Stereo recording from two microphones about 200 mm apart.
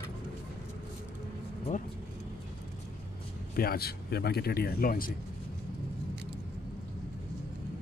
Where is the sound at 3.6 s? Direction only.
50° left (ahead or behind).